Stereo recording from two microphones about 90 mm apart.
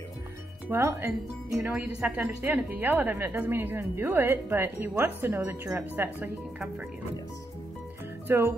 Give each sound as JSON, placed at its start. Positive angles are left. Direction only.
{"t": 0.7, "sound": "a woman's voice", "side_deg": -25}
{"t": 8.3, "sound": "a woman's voice", "side_deg": -30}